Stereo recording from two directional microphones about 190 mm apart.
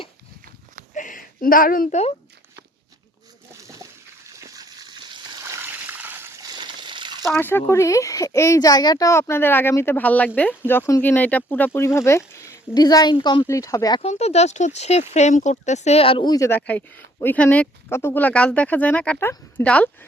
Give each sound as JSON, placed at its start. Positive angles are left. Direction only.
{"t": 0.9, "sound": "speech", "side_deg": 45}
{"t": 3.5, "sound": "a sound", "side_deg": -15}
{"t": 5.5, "sound": "splash", "side_deg": -10}
{"t": 7.3, "sound": "speech", "side_deg": 10}
{"t": 14.0, "sound": "speech", "side_deg": 35}